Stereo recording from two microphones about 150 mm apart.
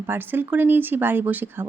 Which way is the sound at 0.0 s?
15° right (ahead or behind).